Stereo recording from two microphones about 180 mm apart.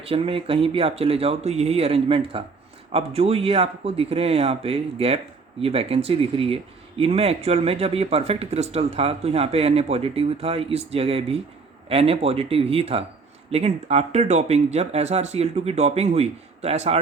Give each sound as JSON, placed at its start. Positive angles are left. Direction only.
{"t": 0.1, "sound": "speech", "side_deg": -30}